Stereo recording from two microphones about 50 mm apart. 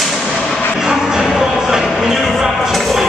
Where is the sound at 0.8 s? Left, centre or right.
Centre.